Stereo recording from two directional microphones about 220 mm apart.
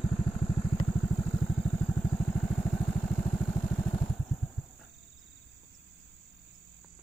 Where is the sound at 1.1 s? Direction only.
5° left (ahead or behind).